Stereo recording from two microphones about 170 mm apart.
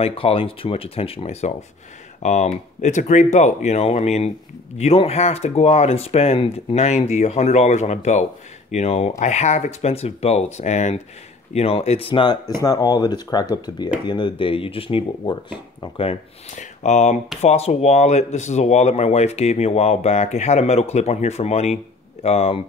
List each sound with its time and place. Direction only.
0.0 s speech: 35° left (ahead or behind)